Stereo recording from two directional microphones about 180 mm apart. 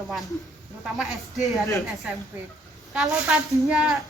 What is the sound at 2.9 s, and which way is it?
A woman's voice, 5° right (ahead or behind).